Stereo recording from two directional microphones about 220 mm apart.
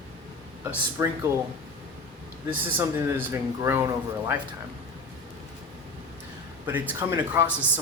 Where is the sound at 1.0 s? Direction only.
15° right (ahead or behind).